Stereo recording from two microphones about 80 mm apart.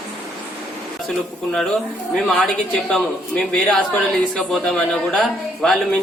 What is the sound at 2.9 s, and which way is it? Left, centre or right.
Speech, centre.